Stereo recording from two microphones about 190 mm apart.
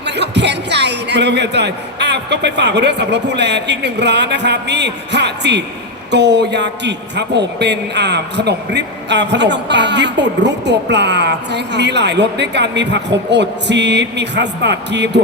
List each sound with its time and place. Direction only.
0.0 s a man's voice: 65° right (ahead or behind)